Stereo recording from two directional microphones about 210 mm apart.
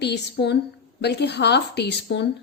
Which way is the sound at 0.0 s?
55° left (ahead or behind).